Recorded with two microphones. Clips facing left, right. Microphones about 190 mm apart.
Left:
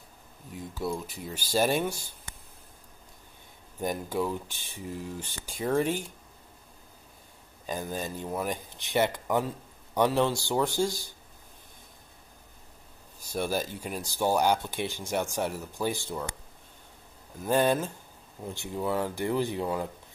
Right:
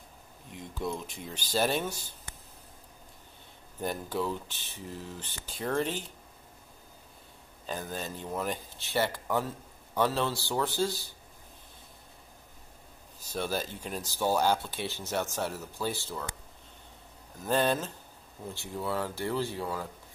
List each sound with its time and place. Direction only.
0.7 s speech: 5° left (ahead or behind)
3.8 s speech: 15° left (ahead or behind)
7.6 s speech: 10° left (ahead or behind)
13.3 s speech: 10° left (ahead or behind)
17.4 s speech: 10° left (ahead or behind)